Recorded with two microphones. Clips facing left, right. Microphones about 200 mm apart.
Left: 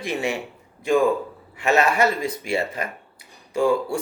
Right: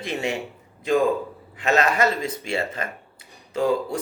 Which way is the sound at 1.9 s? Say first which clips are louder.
Left 1 dB; 25° right (ahead or behind).